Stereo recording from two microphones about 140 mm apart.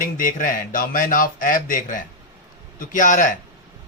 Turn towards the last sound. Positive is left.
turn(degrees=65)  # may be behind; listen again after turning